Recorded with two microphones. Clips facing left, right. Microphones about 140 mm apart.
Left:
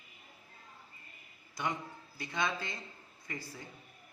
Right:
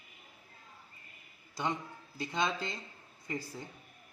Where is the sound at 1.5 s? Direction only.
25° right (ahead or behind).